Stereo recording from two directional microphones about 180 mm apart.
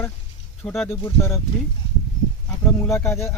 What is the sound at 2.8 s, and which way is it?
Speech, 15° left (ahead or behind).